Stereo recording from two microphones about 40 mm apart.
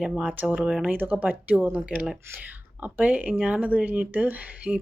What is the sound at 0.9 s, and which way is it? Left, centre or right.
Speech, right.